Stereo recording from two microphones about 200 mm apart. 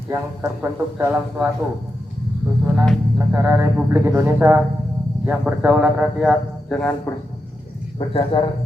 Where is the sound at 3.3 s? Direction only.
10° right (ahead or behind).